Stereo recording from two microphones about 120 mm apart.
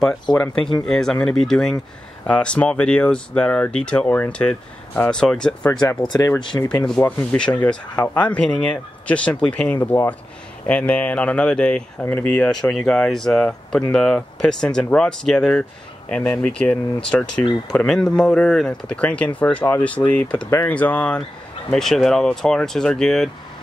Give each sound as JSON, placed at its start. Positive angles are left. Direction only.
{"t": 0.8, "sound": "speech", "side_deg": 5}
{"t": 6.0, "sound": "speech", "side_deg": 30}
{"t": 6.5, "sound": "speech", "side_deg": 20}